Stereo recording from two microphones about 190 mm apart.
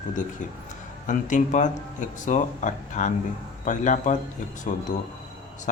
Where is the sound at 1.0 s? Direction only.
40° left (ahead or behind).